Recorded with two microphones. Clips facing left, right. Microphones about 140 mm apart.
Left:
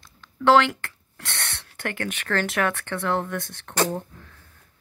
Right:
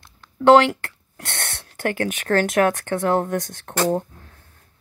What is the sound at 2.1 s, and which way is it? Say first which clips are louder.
Speech: right 6 dB; 45° right (ahead or behind).